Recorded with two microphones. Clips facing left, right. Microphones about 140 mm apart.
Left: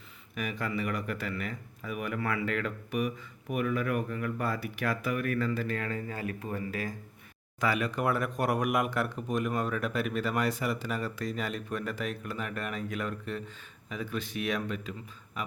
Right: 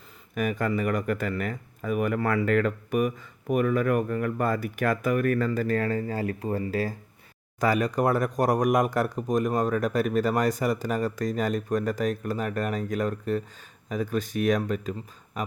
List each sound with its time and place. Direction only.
0.3 s speech: 45° right (ahead or behind)